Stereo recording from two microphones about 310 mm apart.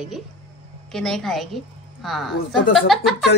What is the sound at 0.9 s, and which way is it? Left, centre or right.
A woman's voice, centre.